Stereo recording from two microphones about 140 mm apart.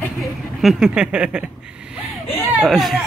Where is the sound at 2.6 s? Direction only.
Centre (ahead or behind).